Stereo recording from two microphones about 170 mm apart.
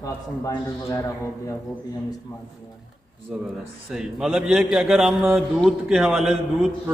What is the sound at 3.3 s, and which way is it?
A man's voice, 5° right (ahead or behind).